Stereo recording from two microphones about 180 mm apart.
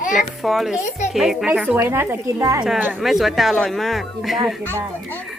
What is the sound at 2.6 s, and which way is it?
Speech, 5° right (ahead or behind).